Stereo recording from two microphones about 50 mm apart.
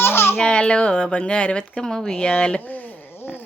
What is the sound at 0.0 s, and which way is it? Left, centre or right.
Babbling, left.